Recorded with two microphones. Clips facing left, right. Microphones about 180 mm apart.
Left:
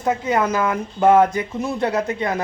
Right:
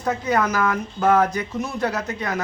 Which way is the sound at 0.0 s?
20° left (ahead or behind).